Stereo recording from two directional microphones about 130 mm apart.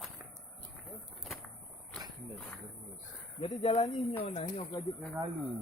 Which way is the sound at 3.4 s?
45° left (ahead or behind).